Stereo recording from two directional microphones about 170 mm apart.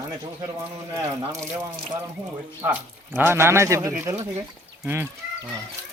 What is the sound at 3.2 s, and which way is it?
Speech, 15° right (ahead or behind).